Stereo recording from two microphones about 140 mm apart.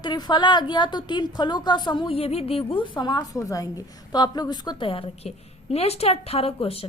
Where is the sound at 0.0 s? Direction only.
30° left (ahead or behind).